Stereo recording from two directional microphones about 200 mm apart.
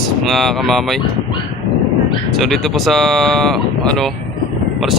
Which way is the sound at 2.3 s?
Centre (ahead or behind).